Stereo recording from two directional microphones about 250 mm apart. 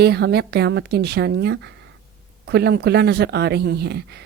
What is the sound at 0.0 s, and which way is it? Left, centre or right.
A woman's voice, right.